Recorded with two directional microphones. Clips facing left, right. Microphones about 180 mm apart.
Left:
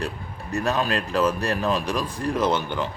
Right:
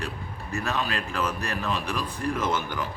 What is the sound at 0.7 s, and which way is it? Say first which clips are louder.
A man's voice: left 6 dB; 40° left (ahead or behind).